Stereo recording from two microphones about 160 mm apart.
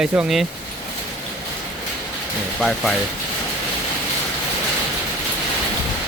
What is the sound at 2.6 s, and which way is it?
Speech, 5° left (ahead or behind).